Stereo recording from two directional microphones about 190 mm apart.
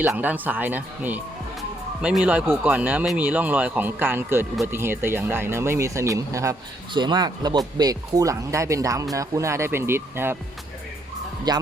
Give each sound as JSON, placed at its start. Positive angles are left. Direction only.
{"t": 0.0, "sound": "speech", "side_deg": -10}
{"t": 11.5, "sound": "speech", "side_deg": -20}